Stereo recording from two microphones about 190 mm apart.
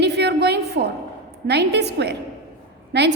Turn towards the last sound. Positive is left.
turn(degrees=-65)  # may be behind; listen again after turning